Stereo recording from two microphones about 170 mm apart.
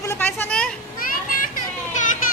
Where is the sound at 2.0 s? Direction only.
45° left (ahead or behind).